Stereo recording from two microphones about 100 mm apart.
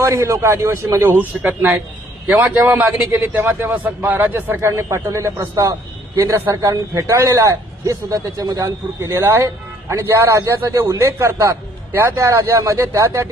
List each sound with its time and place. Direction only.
0.0 s a man's voice: 25° right (ahead or behind)